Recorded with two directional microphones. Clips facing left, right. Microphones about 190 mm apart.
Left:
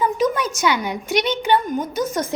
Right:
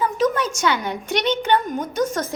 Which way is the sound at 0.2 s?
10° left (ahead or behind).